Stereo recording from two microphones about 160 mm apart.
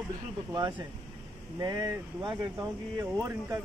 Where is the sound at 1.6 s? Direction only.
25° right (ahead or behind).